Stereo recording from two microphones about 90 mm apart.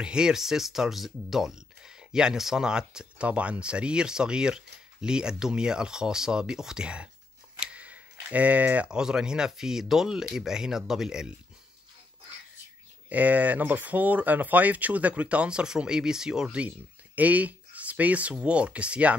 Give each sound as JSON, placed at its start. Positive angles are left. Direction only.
{"t": 0.0, "sound": "speech", "side_deg": -10}
{"t": 13.1, "sound": "speech", "side_deg": -15}